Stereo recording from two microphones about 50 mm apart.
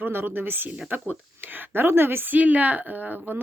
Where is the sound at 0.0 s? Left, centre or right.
Right.